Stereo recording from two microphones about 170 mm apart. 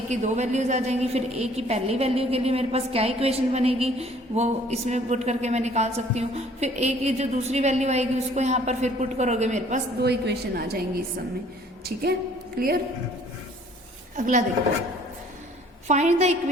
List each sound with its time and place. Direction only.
0.1 s a woman's voice: 45° right (ahead or behind)
10.0 s a woman's voice: 70° right (ahead or behind)
12.5 s a woman's voice: 60° right (ahead or behind)
14.2 s speech: 45° right (ahead or behind)
15.9 s a woman's voice: 40° right (ahead or behind)